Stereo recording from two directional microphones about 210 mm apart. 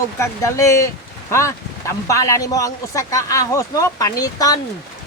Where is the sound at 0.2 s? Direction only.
15° left (ahead or behind).